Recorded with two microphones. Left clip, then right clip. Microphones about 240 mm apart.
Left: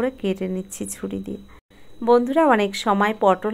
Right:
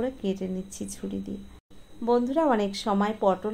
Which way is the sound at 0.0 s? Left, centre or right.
Left.